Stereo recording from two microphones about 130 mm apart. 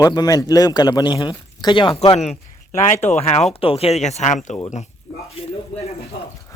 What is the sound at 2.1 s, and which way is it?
Speech, 55° left (ahead or behind).